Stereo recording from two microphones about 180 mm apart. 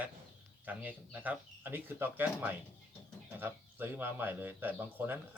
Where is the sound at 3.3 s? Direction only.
10° right (ahead or behind).